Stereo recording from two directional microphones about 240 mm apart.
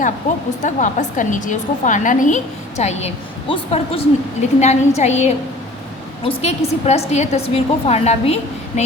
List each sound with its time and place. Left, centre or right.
0.6 s a woman's voice: left